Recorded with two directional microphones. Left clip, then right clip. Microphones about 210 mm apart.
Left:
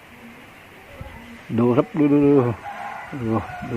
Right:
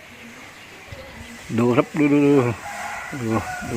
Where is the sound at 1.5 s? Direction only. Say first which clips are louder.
Even; centre (ahead or behind).